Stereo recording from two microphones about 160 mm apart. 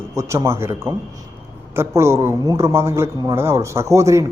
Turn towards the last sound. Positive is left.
turn(degrees=-20)  # may be behind; listen again after turning